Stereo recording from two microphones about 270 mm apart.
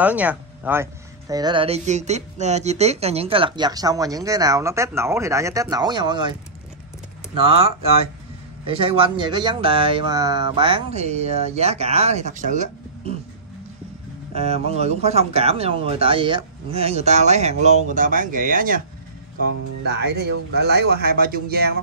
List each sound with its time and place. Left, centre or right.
0.0 s speech: centre
7.3 s speech: right
14.3 s speech: right